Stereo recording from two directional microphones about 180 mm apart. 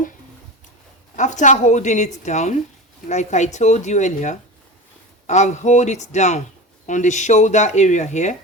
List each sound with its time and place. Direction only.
1.1 s speech: 45° left (ahead or behind)